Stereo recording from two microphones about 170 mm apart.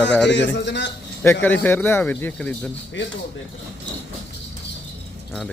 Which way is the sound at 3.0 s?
90° left.